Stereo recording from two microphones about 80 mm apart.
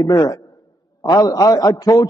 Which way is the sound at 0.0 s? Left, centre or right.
Left.